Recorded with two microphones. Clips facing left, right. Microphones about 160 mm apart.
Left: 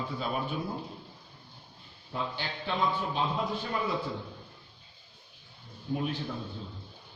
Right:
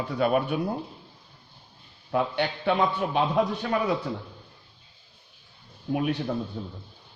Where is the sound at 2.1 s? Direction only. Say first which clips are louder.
Right 10 dB; 70° right (ahead or behind).